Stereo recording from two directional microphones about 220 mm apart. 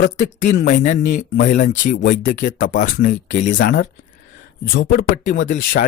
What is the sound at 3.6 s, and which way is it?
A woman's voice, 45° left (ahead or behind).